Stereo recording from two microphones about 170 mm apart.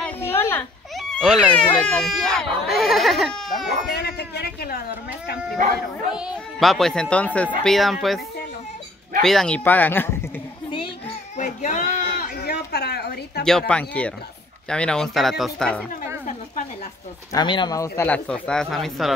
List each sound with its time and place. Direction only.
0.0 s a sound: 15° left (ahead or behind)
0.9 s speech: centre (ahead or behind)
4.0 s speech: 75° left (ahead or behind)
6.1 s speech: centre (ahead or behind)
9.2 s a man's voice: 5° left (ahead or behind)
11.3 s a sound: 45° left (ahead or behind); by 13.4 s 70° left (ahead or behind)
13.5 s a man's voice: 5° left (ahead or behind)
17.3 s a man's voice: 25° left (ahead or behind); by 19.1 s centre (ahead or behind)